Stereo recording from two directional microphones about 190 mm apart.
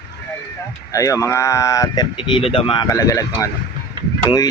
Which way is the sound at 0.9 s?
15° left (ahead or behind).